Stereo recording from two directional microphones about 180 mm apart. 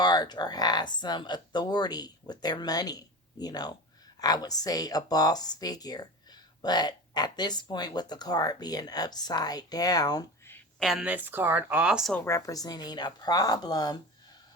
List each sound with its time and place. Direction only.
0.0 s speech: 25° left (ahead or behind)
10.8 s speech: centre (ahead or behind)
12.1 s speech: 15° left (ahead or behind)